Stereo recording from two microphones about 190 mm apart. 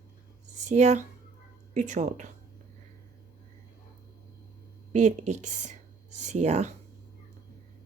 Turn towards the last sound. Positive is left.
turn(degrees=-35)  # may be behind; listen again after turning